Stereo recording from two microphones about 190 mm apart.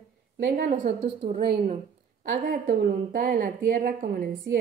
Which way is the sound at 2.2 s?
45° right (ahead or behind).